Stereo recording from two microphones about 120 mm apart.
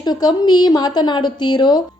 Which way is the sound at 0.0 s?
35° left (ahead or behind).